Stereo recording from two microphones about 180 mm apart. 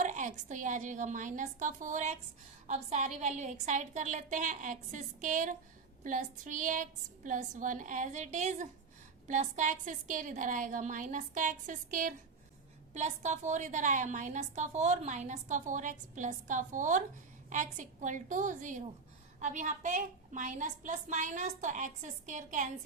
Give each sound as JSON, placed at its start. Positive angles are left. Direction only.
{"t": 0.0, "sound": "a woman's voice", "side_deg": -45}